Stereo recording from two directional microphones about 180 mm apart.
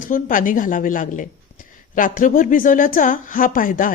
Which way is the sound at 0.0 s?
50° left (ahead or behind).